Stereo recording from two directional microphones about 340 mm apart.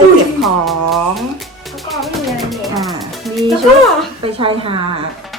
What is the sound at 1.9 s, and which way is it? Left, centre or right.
Music, centre.